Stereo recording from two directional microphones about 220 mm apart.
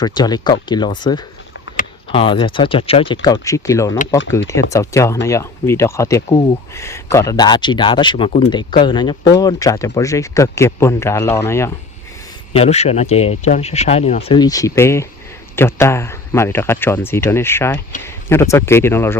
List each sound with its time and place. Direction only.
0.0 s speech: 20° left (ahead or behind)
12.5 s speech: 30° left (ahead or behind); by 19.1 s 10° left (ahead or behind)